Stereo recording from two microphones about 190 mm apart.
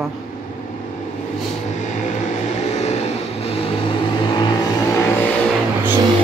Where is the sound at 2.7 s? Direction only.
35° left (ahead or behind).